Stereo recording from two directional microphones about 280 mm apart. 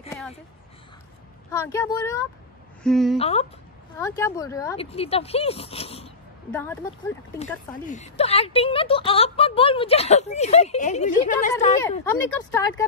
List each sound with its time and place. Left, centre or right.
1.5 s speech: centre
3.2 s speech: left
4.0 s speech: centre
6.5 s speech: centre
7.3 s speech: left
12.0 s speech: centre